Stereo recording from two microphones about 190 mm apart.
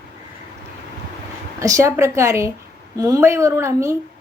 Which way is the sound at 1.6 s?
15° right (ahead or behind).